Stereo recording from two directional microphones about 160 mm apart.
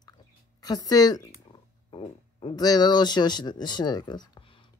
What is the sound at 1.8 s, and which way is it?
Speech, 35° left (ahead or behind).